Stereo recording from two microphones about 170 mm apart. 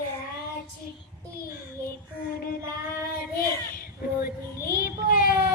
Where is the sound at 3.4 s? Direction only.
60° left (ahead or behind).